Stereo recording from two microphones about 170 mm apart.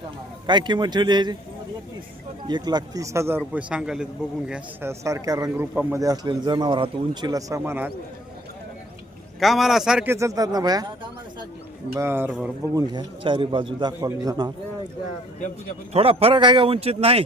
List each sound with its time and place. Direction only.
0.4 s a man's voice: 25° right (ahead or behind)
2.5 s speech: 25° right (ahead or behind); by 4.9 s 5° right (ahead or behind)
4.9 s a man's voice: 20° right (ahead or behind)
5.7 s speech: 10° right (ahead or behind)
6.0 s a man's voice: 25° right (ahead or behind)
9.4 s speech: centre (ahead or behind); by 11.4 s 25° right (ahead or behind)
11.9 s speech: 15° right (ahead or behind)
12.7 s a man's voice: 25° right (ahead or behind)
15.9 s a man's voice: 35° right (ahead or behind)